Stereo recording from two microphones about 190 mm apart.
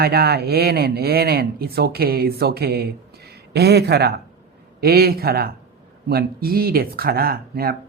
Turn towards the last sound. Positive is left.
turn(degrees=-55)  # may be behind; listen again after turning